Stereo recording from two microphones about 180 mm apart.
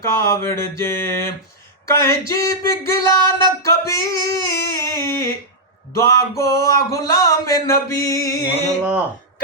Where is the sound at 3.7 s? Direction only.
15° left (ahead or behind).